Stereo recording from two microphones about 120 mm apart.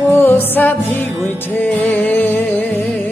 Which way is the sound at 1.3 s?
15° left (ahead or behind).